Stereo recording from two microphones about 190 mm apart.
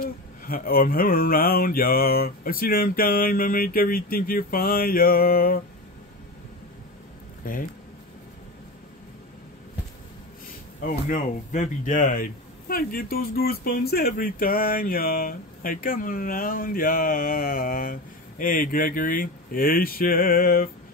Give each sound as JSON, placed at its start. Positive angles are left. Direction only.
{"t": 0.0, "sound": "speech", "side_deg": 50}
{"t": 7.4, "sound": "speech", "side_deg": 45}
{"t": 10.8, "sound": "speech", "side_deg": 45}